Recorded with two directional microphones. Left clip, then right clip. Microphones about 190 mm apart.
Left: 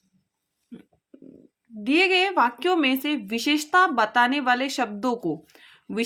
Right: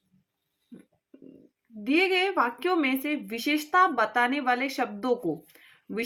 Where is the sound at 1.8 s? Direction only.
40° left (ahead or behind).